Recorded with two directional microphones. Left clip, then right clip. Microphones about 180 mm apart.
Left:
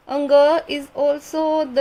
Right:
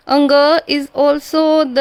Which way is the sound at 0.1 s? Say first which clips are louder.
Right 4 dB; 40° right (ahead or behind).